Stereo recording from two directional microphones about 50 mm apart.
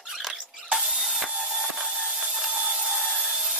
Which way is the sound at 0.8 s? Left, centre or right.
Centre.